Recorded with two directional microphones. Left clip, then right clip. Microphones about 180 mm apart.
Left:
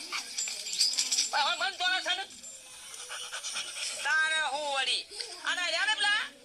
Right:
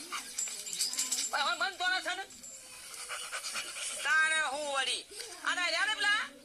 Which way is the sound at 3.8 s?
25° right (ahead or behind).